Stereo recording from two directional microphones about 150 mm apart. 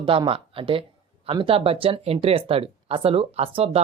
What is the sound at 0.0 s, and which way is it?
Speech, 35° right (ahead or behind).